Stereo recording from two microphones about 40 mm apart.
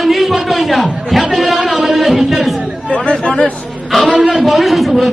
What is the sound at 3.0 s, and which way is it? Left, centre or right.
Chatter, left.